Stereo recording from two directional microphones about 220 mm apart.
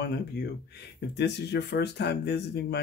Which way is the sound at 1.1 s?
50° left (ahead or behind).